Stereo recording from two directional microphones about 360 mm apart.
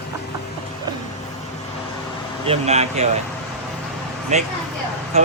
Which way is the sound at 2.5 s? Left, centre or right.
Centre.